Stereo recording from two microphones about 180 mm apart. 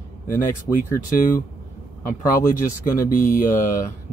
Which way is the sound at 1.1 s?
50° left (ahead or behind).